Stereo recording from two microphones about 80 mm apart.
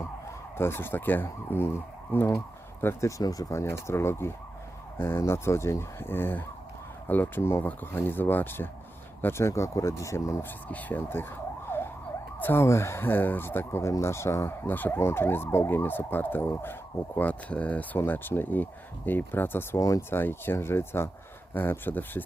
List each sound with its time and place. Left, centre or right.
0.5 s speech: left
2.8 s speech: left
3.6 s speech: left
10.4 s speech: left
19.8 s speech: left
20.1 s speech: left